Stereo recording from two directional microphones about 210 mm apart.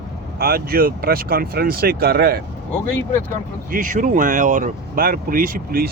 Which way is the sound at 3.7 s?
40° right (ahead or behind).